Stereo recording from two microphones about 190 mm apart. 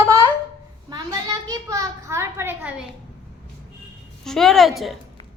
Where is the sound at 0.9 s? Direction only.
20° right (ahead or behind).